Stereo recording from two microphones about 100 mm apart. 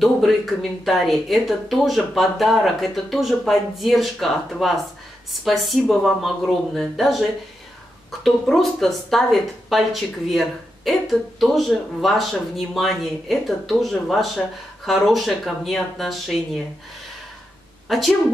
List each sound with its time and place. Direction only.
0.0 s speech: centre (ahead or behind)
17.8 s a woman's voice: centre (ahead or behind)